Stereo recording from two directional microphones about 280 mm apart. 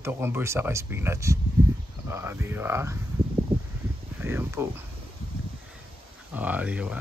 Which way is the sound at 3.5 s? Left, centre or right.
Centre.